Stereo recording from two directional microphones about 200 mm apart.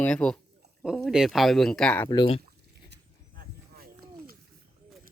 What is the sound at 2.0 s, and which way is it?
Speech, 25° left (ahead or behind).